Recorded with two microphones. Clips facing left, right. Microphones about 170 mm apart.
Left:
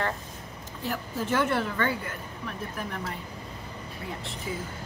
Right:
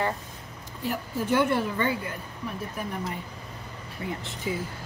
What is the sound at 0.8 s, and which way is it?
A woman's voice, 10° right (ahead or behind).